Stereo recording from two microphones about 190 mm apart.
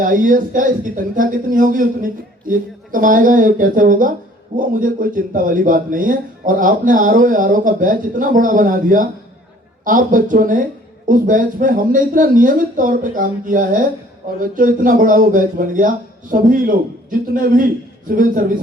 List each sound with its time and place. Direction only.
0.0 s a man's voice: 45° right (ahead or behind)